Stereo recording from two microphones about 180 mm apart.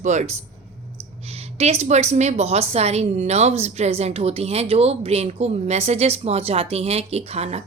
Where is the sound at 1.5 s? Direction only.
35° right (ahead or behind).